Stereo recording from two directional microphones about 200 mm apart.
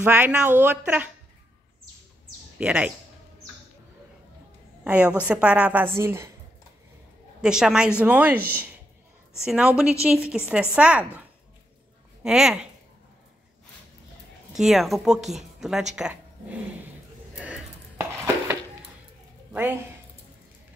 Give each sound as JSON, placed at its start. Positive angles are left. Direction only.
{"t": 0.0, "sound": "speech", "side_deg": -10}
{"t": 2.6, "sound": "a woman's voice", "side_deg": -5}
{"t": 4.8, "sound": "a woman's voice", "side_deg": -5}
{"t": 7.4, "sound": "a woman's voice", "side_deg": -5}
{"t": 9.4, "sound": "a woman's voice", "side_deg": 0}
{"t": 14.6, "sound": "a woman's voice", "side_deg": 0}
{"t": 17.4, "sound": "a sound", "side_deg": -5}
{"t": 19.5, "sound": "speech", "side_deg": -10}